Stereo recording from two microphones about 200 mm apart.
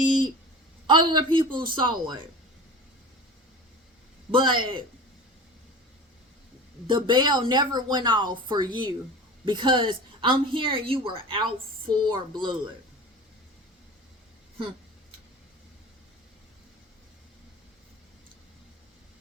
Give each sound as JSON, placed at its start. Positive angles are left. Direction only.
{"t": 0.9, "sound": "speech", "side_deg": -25}
{"t": 4.3, "sound": "speech", "side_deg": -25}
{"t": 6.8, "sound": "speech", "side_deg": -25}